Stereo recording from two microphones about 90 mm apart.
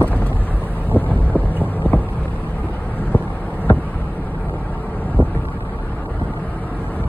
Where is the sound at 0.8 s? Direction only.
20° left (ahead or behind).